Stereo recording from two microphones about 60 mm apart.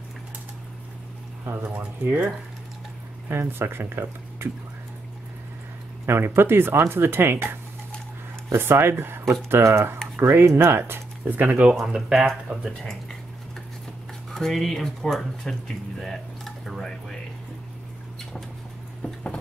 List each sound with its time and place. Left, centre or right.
1.6 s speech: right
3.3 s speech: right
6.0 s speech: right
8.5 s speech: right
11.8 s speech: centre
14.3 s speech: centre
16.1 s a sound: centre